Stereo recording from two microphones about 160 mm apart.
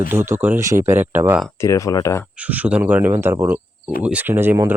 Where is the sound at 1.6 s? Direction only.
20° left (ahead or behind).